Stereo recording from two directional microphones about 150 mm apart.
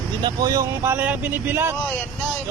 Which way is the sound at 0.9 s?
10° right (ahead or behind).